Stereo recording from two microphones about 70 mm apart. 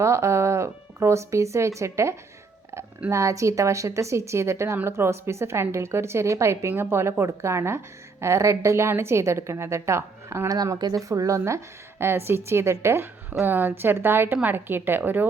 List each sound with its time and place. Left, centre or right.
0.0 s a woman's voice: right
10.5 s speech: right
11.1 s a woman's voice: right